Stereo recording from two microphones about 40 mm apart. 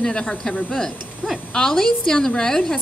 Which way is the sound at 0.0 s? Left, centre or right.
Centre.